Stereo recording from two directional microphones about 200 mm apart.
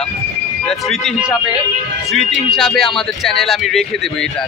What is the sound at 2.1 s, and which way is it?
A man's voice, centre (ahead or behind).